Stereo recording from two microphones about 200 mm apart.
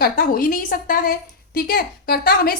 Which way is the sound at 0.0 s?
45° left (ahead or behind).